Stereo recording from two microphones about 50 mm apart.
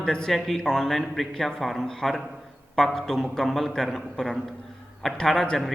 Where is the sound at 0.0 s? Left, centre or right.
Centre.